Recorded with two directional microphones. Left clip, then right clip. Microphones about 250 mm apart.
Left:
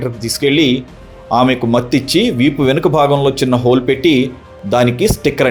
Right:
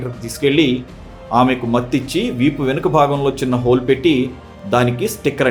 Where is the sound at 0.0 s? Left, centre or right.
Left.